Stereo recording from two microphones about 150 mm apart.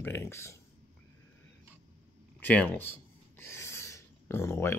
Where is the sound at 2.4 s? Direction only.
10° left (ahead or behind).